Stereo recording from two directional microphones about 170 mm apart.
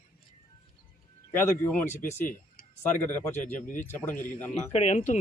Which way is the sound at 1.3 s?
10° left (ahead or behind).